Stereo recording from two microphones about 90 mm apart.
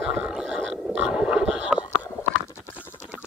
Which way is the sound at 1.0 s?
10° right (ahead or behind).